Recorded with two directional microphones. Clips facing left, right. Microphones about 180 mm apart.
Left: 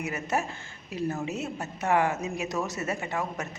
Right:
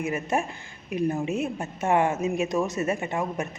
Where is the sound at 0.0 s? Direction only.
20° right (ahead or behind).